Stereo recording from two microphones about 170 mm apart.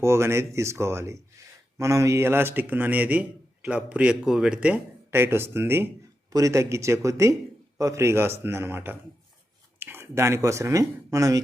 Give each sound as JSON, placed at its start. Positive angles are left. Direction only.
{"t": 0.0, "sound": "a man's voice", "side_deg": -15}